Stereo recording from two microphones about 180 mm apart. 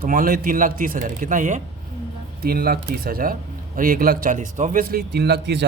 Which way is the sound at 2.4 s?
55° right (ahead or behind).